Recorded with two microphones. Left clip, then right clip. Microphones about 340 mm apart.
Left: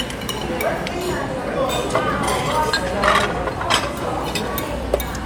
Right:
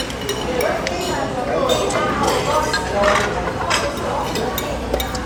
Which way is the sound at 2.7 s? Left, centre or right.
Left.